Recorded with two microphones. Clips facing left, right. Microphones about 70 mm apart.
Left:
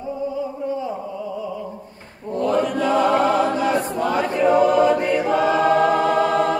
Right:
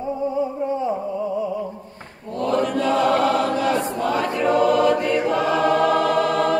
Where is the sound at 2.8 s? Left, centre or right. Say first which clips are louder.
Left 1 dB; centre.